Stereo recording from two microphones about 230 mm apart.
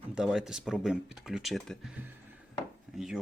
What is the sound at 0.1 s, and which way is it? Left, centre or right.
A man's voice, centre.